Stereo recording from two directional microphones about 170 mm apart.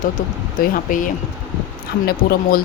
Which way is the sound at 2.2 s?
60° left (ahead or behind).